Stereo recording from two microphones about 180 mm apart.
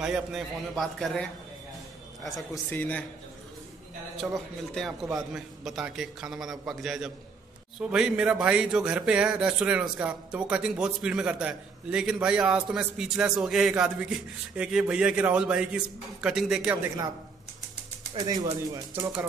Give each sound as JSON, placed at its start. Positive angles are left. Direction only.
{"t": 0.0, "sound": "speech", "side_deg": -5}
{"t": 2.5, "sound": "speech", "side_deg": 10}
{"t": 4.2, "sound": "speech", "side_deg": 0}
{"t": 18.2, "sound": "speech", "side_deg": -20}